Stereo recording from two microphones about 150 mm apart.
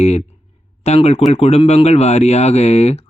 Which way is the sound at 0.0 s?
45° left (ahead or behind).